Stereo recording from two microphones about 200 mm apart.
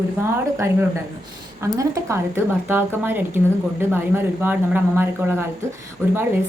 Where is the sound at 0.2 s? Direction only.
10° right (ahead or behind).